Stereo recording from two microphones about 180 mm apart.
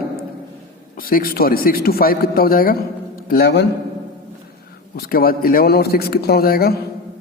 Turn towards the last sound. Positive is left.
turn(degrees=60)  # may be behind; listen again after turning